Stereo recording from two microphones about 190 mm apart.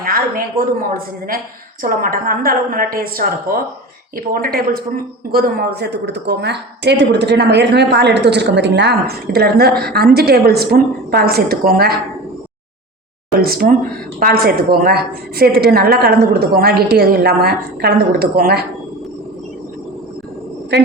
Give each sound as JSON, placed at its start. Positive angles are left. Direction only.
{"t": 0.0, "sound": "a woman's voice", "side_deg": -50}
{"t": 13.4, "sound": "a woman's voice", "side_deg": -50}